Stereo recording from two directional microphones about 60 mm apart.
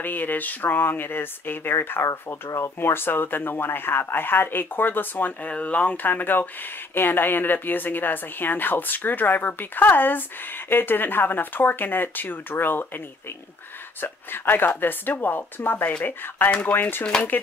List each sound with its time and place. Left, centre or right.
0.0 s a woman's voice: left
14.0 s a woman's voice: left
17.0 s speech: centre